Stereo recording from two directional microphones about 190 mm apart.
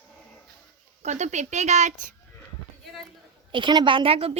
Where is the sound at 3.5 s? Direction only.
25° right (ahead or behind).